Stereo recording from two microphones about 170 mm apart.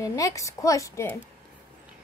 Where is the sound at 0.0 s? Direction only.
20° left (ahead or behind).